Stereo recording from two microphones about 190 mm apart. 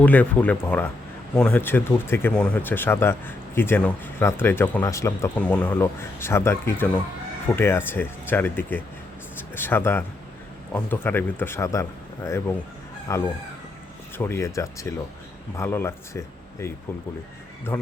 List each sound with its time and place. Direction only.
0.0 s speech: 10° left (ahead or behind)